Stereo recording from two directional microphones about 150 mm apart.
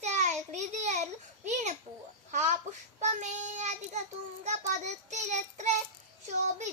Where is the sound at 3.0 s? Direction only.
50° right (ahead or behind).